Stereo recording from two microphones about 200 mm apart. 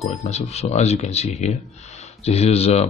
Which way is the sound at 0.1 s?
35° left (ahead or behind).